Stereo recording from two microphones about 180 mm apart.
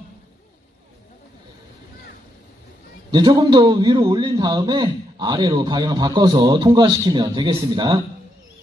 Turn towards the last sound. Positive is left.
turn(degrees=-25)  # may be behind; listen again after turning